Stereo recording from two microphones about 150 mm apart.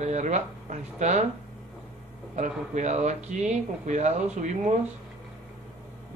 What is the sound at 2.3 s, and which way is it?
Speech, 50° right (ahead or behind).